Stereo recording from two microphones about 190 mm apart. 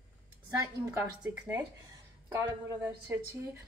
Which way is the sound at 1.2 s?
5° right (ahead or behind).